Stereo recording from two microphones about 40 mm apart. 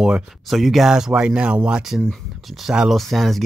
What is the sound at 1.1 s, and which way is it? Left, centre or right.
Speech, right.